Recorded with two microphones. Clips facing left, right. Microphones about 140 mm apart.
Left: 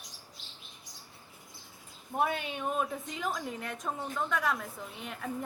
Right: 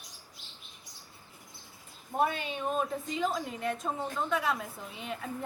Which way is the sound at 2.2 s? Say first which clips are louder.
Right 1 dB; 5° left (ahead or behind).